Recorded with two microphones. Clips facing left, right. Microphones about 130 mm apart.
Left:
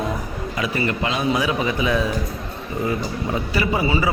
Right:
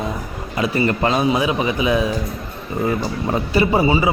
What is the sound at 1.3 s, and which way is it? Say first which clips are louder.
Speech: right 2 dB; 20° right (ahead or behind).